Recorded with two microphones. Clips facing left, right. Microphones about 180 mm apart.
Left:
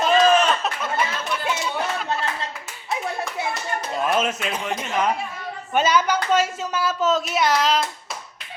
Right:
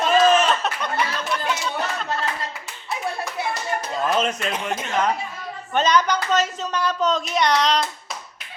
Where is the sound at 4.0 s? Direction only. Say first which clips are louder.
Even; 5° left (ahead or behind).